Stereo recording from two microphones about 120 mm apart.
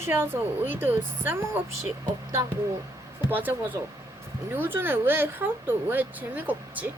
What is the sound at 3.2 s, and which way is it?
A woman's voice, 15° right (ahead or behind).